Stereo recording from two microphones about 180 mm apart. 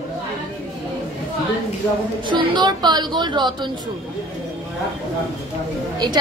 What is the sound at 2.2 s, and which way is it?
A woman's voice, 25° right (ahead or behind).